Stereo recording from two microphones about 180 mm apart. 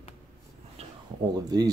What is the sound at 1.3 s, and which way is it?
Speech, 20° right (ahead or behind).